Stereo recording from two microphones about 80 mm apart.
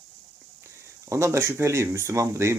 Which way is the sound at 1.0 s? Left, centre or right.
Right.